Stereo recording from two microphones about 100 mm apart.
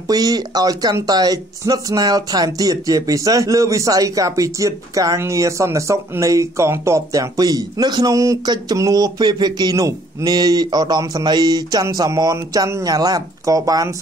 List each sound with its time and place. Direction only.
0.1 s speech: 40° right (ahead or behind)